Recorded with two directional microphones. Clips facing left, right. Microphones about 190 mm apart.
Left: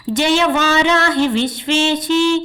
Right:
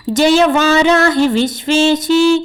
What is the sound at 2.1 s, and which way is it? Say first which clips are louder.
Music: right 4 dB; 5° right (ahead or behind).